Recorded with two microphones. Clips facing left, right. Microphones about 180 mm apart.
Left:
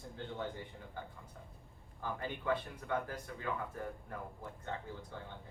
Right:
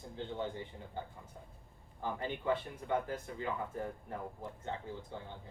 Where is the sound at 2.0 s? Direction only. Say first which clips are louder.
Right 2 dB; 20° right (ahead or behind).